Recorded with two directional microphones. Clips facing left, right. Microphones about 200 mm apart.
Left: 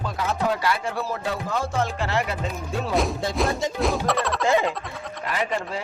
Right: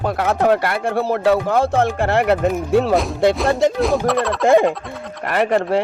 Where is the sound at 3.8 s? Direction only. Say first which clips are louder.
Right 6 dB; centre (ahead or behind).